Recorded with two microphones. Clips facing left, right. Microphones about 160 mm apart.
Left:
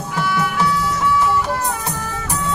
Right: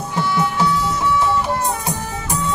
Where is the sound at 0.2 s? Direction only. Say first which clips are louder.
Right 1 dB; 25° right (ahead or behind).